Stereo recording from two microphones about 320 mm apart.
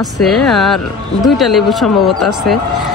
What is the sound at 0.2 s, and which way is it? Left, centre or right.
Speech, centre.